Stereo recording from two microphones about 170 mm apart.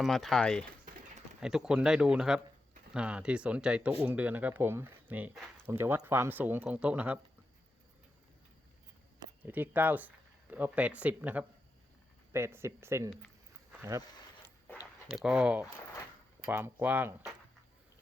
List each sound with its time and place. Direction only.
0.0 s speech: centre (ahead or behind)
9.4 s speech: 10° right (ahead or behind)
15.1 s speech: 5° right (ahead or behind)